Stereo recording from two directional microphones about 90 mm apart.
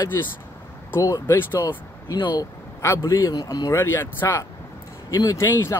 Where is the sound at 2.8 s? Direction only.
35° left (ahead or behind).